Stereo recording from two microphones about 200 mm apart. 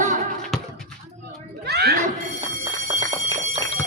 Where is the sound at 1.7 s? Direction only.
55° right (ahead or behind).